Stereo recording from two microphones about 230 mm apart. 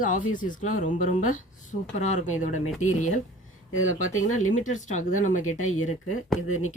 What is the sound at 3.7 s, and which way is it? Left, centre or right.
Speech, left.